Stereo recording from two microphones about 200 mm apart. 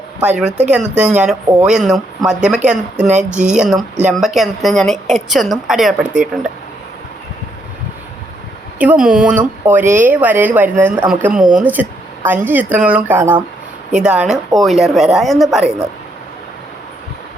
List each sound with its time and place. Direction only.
0.2 s a woman's voice: 5° right (ahead or behind)
8.8 s speech: 5° right (ahead or behind)
9.8 s speech: 40° right (ahead or behind)
10.1 s a woman's voice: 10° right (ahead or behind)